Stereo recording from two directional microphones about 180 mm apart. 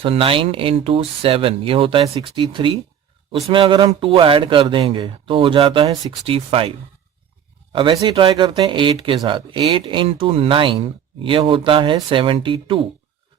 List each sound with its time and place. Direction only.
0.0 s speech: 30° right (ahead or behind)